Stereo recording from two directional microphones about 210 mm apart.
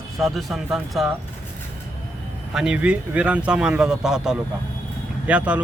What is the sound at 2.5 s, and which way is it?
Speech, 5° right (ahead or behind).